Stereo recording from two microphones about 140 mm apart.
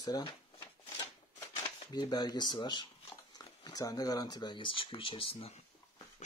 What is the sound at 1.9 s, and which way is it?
Speech, 30° left (ahead or behind).